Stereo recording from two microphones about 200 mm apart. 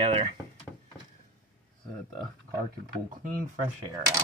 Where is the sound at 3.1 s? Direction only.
40° right (ahead or behind).